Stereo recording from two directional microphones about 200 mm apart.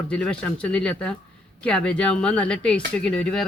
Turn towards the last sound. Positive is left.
turn(degrees=5)  # may be behind; listen again after turning